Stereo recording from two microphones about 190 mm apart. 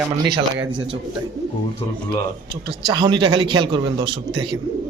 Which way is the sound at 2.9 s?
25° right (ahead or behind).